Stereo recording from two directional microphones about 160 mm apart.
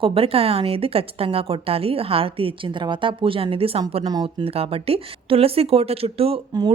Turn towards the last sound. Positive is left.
turn(degrees=-40)  # may be behind; listen again after turning